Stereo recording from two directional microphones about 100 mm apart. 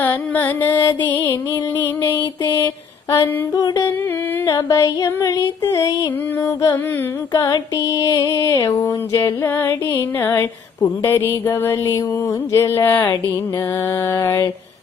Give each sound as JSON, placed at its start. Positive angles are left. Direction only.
{"t": 0.0, "sound": "mantra", "side_deg": 20}
{"t": 3.2, "sound": "music", "side_deg": 40}
{"t": 7.3, "sound": "mantra", "side_deg": 35}